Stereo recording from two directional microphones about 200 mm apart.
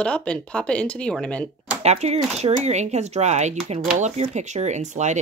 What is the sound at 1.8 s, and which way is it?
Speech, 30° right (ahead or behind).